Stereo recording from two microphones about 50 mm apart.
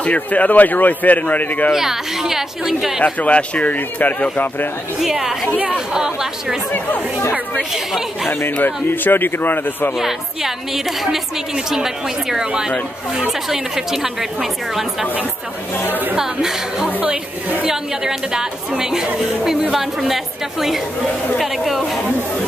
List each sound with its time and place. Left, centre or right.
0.0 s speech: left
1.7 s a woman's voice: centre
3.0 s speech: left
5.0 s a woman's voice: centre
7.7 s a woman's voice: centre
8.3 s a man's voice: left
9.9 s a woman's voice: centre
15.9 s a woman's voice: right
16.2 s a woman's voice: centre